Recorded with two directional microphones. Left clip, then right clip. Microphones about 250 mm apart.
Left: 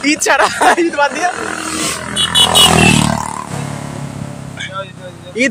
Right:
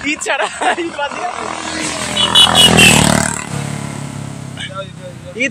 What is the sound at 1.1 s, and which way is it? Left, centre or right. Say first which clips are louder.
Vehicle: left 4 dB; left.